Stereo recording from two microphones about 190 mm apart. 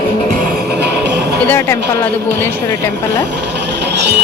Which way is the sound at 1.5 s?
15° left (ahead or behind).